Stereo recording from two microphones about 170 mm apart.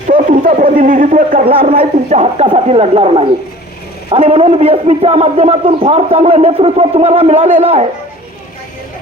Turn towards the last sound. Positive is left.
turn(degrees=-35)  # may be behind; listen again after turning